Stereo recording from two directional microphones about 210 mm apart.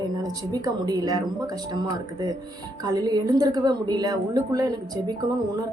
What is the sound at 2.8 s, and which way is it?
A woman's voice, 20° right (ahead or behind).